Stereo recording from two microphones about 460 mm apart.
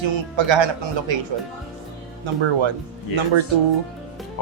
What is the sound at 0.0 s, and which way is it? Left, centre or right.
Speech, right.